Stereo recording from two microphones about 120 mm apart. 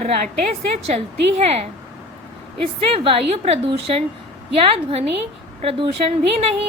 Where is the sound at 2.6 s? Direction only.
50° right (ahead or behind).